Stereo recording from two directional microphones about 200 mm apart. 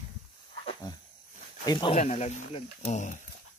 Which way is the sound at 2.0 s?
35° left (ahead or behind).